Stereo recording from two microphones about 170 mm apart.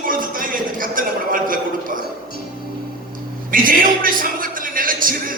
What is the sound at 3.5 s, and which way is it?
A man's voice, 55° right (ahead or behind).